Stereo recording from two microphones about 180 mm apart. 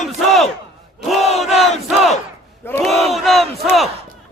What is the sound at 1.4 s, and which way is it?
Crowd, centre (ahead or behind).